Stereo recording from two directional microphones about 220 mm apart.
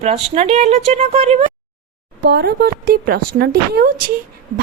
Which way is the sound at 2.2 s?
45° right (ahead or behind).